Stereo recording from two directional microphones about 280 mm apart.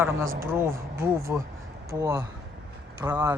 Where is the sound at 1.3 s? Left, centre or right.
Centre.